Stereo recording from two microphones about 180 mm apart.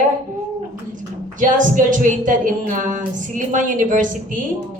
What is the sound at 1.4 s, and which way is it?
A woman's voice, 45° right (ahead or behind).